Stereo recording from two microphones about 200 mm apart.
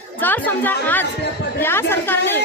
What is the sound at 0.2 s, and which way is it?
Speech, 10° left (ahead or behind).